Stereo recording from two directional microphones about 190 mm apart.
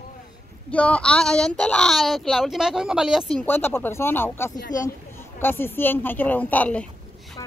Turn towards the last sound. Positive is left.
turn(degrees=10)  # may be behind; listen again after turning